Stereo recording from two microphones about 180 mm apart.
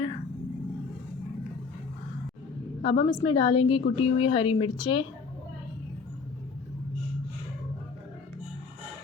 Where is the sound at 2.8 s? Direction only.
30° left (ahead or behind).